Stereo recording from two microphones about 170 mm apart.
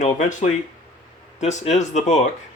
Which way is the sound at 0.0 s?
45° left (ahead or behind).